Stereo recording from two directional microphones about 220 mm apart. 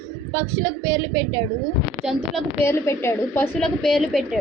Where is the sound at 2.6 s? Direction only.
10° left (ahead or behind).